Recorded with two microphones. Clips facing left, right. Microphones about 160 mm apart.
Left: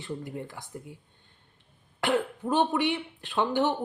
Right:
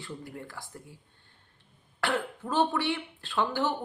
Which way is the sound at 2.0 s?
20° left (ahead or behind).